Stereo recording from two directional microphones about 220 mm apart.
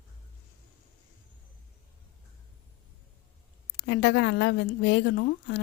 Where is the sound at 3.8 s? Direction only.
50° left (ahead or behind).